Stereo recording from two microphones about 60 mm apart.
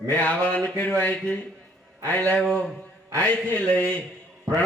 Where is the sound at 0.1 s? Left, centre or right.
Left.